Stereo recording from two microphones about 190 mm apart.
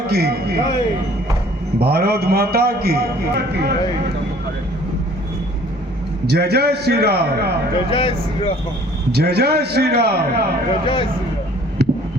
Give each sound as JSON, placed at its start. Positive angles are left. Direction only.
{"t": 0.1, "sound": "a man's voice", "side_deg": -55}
{"t": 1.8, "sound": "a man's voice", "side_deg": -55}
{"t": 6.2, "sound": "a man's voice", "side_deg": -60}
{"t": 7.9, "sound": "speech", "side_deg": 25}
{"t": 9.1, "sound": "a man's voice", "side_deg": -60}
{"t": 10.7, "sound": "speech", "side_deg": 25}
{"t": 11.8, "sound": "a sound", "side_deg": -60}